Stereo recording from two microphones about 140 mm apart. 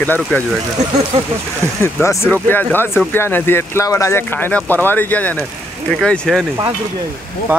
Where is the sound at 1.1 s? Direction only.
45° right (ahead or behind).